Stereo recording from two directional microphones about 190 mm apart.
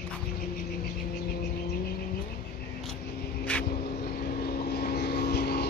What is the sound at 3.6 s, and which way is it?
Vehicle, 55° left (ahead or behind).